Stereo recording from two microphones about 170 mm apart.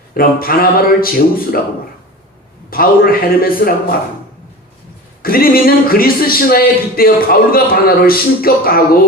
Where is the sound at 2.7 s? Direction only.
60° left (ahead or behind).